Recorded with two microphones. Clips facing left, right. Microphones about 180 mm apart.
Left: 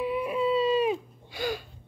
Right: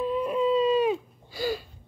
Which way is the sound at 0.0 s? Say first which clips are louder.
Right 2 dB; 10° left (ahead or behind).